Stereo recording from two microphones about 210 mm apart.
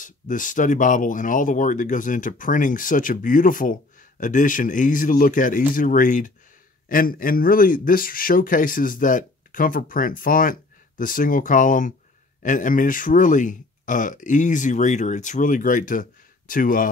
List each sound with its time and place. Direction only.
0.0 s speech: 40° left (ahead or behind)